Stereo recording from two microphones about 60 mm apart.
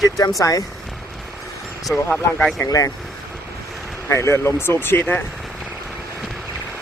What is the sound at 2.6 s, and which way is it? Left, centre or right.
Speech, left.